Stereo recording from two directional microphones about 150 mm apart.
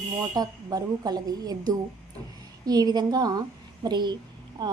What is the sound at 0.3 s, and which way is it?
A woman's voice, 25° right (ahead or behind).